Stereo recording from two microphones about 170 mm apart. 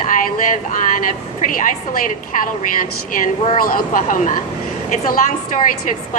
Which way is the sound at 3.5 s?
55° left (ahead or behind).